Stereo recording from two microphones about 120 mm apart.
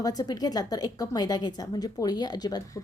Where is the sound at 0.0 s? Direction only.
30° left (ahead or behind).